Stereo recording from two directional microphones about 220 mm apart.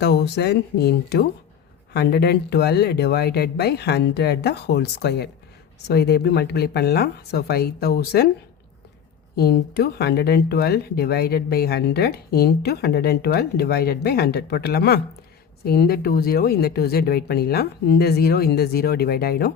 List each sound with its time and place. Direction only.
0.0 s speech: 50° left (ahead or behind)
9.3 s speech: 45° left (ahead or behind)